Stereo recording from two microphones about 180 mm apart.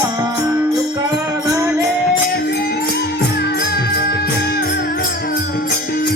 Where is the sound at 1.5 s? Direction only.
20° right (ahead or behind).